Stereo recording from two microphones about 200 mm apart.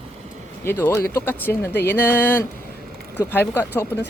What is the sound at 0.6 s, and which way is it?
Speech, 10° left (ahead or behind).